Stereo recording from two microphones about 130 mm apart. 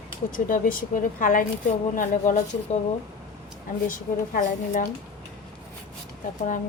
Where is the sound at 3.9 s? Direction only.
90° left.